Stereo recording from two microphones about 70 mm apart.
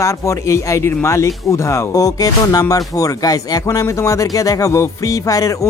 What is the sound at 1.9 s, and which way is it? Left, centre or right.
Speech, left.